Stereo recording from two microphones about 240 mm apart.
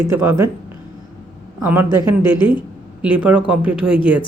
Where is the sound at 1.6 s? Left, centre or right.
Centre.